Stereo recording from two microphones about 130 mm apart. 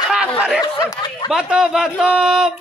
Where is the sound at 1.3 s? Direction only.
5° right (ahead or behind).